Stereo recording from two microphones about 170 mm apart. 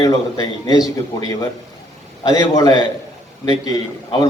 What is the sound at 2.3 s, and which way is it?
A man's voice, 20° left (ahead or behind).